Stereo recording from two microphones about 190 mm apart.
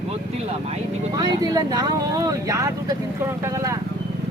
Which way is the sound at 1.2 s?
20° right (ahead or behind).